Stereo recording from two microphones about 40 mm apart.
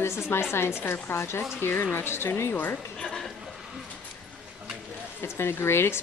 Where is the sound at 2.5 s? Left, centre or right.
Left.